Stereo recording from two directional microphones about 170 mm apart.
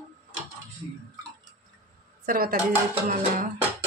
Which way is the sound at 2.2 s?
60° right (ahead or behind).